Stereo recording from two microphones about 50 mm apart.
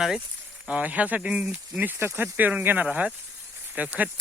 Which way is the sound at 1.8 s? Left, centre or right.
Right.